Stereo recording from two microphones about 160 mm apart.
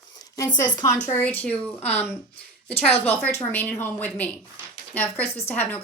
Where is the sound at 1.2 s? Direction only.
10° left (ahead or behind).